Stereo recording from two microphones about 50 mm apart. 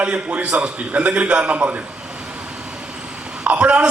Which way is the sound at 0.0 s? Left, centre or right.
Right.